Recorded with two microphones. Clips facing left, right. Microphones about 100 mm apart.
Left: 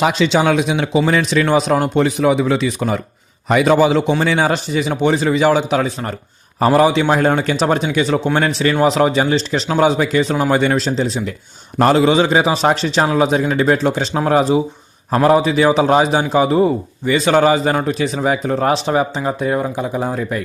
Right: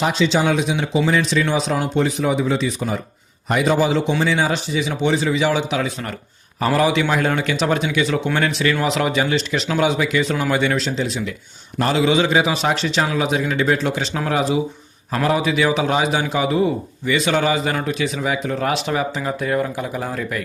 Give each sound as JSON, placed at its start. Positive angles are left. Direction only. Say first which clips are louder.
{"t": 0.0, "sound": "a man's voice", "louder": "left 3 dB", "side_deg": 70}
{"t": 6.6, "sound": "a man's voice", "louder": "left 5 dB", "side_deg": 30}
{"t": 11.8, "sound": "a man's voice", "louder": "left 5 dB", "side_deg": 45}